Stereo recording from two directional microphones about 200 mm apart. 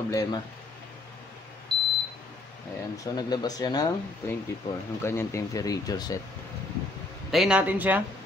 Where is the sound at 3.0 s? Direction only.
20° left (ahead or behind).